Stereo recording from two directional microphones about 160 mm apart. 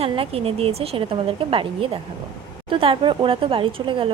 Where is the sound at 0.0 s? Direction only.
35° right (ahead or behind).